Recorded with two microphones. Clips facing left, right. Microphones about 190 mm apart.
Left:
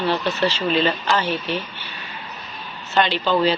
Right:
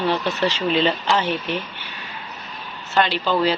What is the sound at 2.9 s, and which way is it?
Speech, 5° right (ahead or behind).